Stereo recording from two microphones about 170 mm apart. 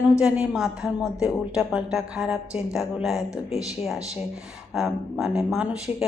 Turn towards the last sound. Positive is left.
turn(degrees=-5)  # may be behind; listen again after turning